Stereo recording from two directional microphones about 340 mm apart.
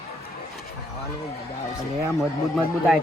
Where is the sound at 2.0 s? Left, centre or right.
Centre.